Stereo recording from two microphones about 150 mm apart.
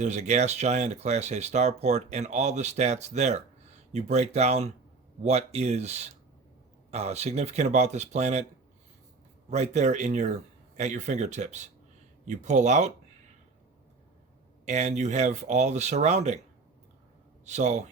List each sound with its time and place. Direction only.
0.0 s speech: 50° right (ahead or behind)
9.5 s speech: 50° right (ahead or behind)
14.6 s speech: 50° right (ahead or behind)
17.4 s speech: 50° right (ahead or behind)